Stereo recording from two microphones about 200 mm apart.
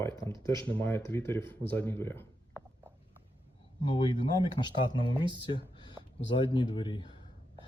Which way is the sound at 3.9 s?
20° left (ahead or behind).